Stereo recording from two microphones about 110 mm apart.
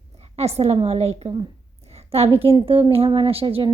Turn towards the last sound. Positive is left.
turn(degrees=-60)  # may be behind; listen again after turning